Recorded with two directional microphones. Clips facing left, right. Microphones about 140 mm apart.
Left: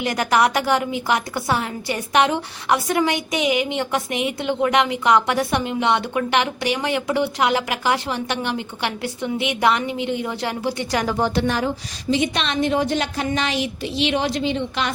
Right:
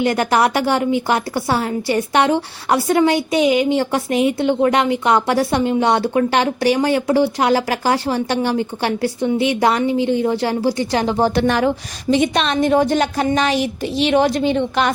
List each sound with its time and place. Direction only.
0.0 s a woman's voice: 30° right (ahead or behind)
11.3 s speech: 70° right (ahead or behind)
12.1 s a woman's voice: 50° right (ahead or behind)